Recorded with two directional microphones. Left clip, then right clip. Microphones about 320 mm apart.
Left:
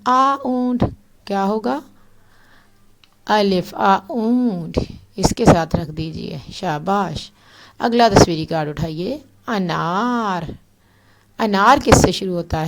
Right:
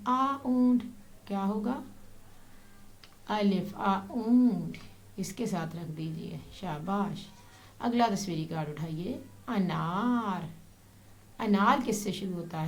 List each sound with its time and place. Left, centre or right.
0.0 s speech: left
3.2 s speech: left